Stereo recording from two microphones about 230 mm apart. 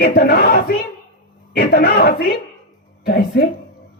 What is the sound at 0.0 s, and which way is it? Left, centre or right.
Speech, left.